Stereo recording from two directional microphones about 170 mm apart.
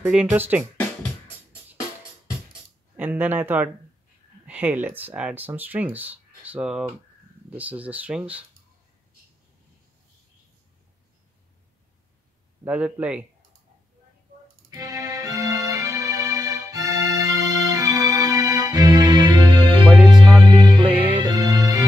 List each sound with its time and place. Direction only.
0.0 s speech: 10° right (ahead or behind)
3.0 s speech: 10° right (ahead or behind)
12.6 s speech: 5° right (ahead or behind)
14.7 s music: 20° right (ahead or behind)